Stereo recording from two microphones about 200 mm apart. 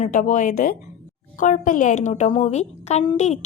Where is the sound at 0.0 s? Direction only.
40° left (ahead or behind).